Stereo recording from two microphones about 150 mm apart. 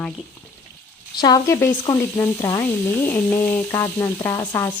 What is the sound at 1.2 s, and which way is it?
Speech, 20° left (ahead or behind).